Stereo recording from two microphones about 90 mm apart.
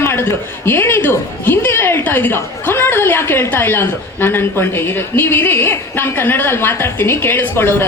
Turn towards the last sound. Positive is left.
turn(degrees=25)  # may be behind; listen again after turning